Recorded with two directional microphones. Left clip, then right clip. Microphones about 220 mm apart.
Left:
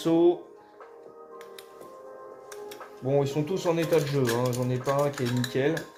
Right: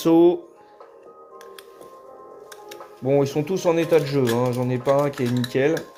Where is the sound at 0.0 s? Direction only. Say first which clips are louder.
Right 6 dB; 45° right (ahead or behind).